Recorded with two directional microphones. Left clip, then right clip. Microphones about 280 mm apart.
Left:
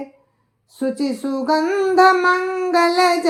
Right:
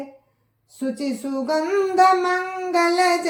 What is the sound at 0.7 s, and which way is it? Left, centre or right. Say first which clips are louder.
Music: left 4 dB; centre.